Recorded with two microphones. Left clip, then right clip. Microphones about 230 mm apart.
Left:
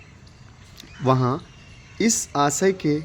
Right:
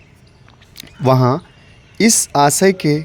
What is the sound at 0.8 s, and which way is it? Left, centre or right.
Speech, right.